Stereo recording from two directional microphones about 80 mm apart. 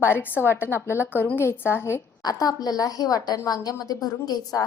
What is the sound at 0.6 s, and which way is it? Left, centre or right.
Speech, right.